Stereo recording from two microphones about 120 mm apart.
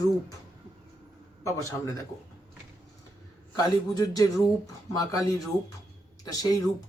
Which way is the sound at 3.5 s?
30° left (ahead or behind).